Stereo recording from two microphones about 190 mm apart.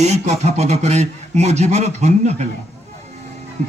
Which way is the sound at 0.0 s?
35° right (ahead or behind).